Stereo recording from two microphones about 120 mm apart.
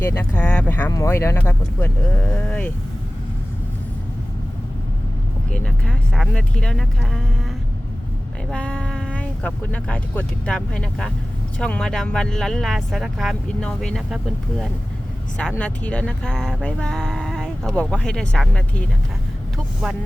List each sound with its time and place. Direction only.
0.3 s speech: 10° left (ahead or behind)
5.5 s speech: 5° left (ahead or behind)
8.4 s speech: 10° left (ahead or behind)
15.4 s speech: 10° left (ahead or behind)